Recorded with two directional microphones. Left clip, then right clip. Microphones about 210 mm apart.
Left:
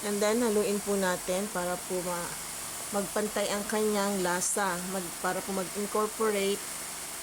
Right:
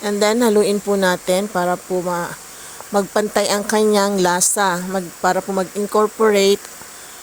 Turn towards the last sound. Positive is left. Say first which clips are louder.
# right 15 dB
turn(degrees=-40)  # may be behind; listen again after turning